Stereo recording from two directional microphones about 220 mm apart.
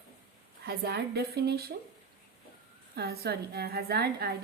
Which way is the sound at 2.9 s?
45° right (ahead or behind).